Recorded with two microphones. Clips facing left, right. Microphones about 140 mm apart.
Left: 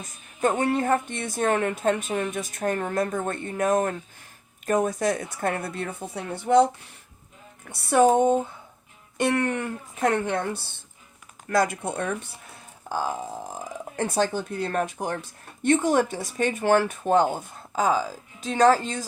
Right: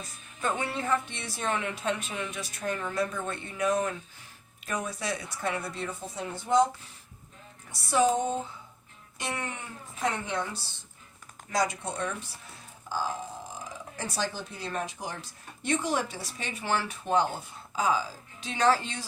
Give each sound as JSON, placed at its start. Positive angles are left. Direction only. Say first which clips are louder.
{"t": 0.0, "sound": "speech", "louder": "left 8 dB", "side_deg": 45}
{"t": 7.7, "sound": "speech", "louder": "left 6 dB", "side_deg": 55}